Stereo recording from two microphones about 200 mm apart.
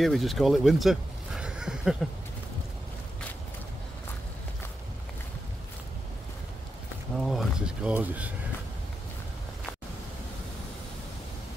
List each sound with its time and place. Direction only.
0.0 s speech: centre (ahead or behind)
7.2 s speech: centre (ahead or behind)